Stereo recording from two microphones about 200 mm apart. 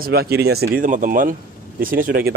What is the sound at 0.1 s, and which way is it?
Speech, 50° right (ahead or behind).